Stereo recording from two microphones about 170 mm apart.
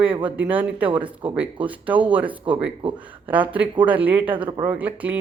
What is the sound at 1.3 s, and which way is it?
A man's voice, 10° right (ahead or behind).